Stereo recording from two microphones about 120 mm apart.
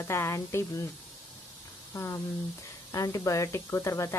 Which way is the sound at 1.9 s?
25° left (ahead or behind).